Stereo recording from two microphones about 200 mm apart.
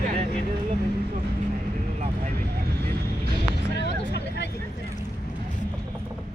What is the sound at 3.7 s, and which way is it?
Hubbub, 55° left (ahead or behind).